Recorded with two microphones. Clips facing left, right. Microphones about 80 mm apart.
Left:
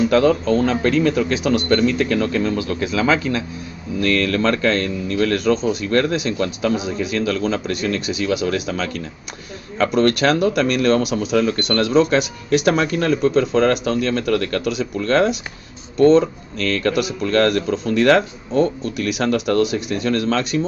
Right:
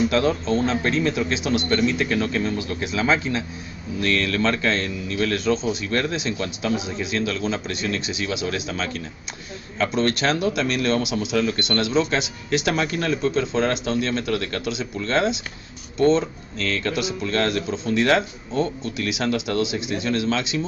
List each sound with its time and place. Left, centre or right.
0.3 s a man's voice: left
4.0 s speech: left